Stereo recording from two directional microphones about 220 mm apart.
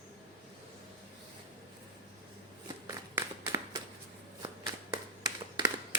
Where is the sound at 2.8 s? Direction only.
15° right (ahead or behind).